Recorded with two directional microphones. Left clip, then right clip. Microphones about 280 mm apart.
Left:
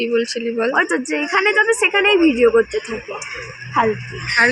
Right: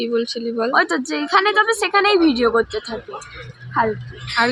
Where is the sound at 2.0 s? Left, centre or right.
Centre.